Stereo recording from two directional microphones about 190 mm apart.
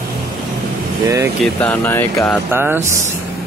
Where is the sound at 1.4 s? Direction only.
10° left (ahead or behind).